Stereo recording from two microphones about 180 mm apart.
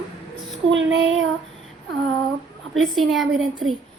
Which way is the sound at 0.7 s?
90° right.